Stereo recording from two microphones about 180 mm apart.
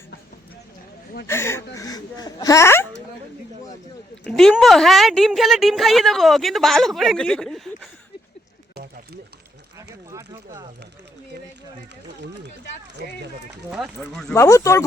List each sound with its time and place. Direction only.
1.3 s speech: 15° left (ahead or behind)
4.3 s a woman's voice: centre (ahead or behind)
9.7 s a sound: 15° right (ahead or behind)
13.7 s a woman's voice: 5° right (ahead or behind)
14.3 s speech: 15° left (ahead or behind)